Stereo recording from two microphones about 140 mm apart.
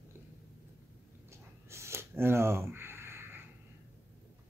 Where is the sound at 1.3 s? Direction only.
20° right (ahead or behind).